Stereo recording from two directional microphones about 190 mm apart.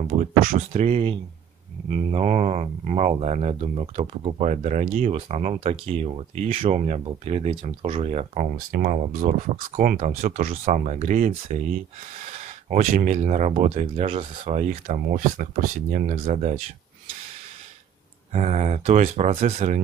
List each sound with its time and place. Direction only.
0.4 s speech: 45° right (ahead or behind)
18.3 s speech: 35° right (ahead or behind)